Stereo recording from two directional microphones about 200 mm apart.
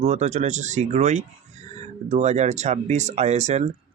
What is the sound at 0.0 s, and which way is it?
Speech, 35° right (ahead or behind).